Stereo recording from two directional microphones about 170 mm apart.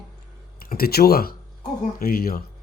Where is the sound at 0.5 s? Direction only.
60° left (ahead or behind).